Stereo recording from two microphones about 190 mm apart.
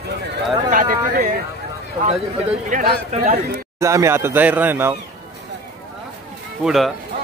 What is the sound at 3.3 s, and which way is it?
Speech, 60° right (ahead or behind).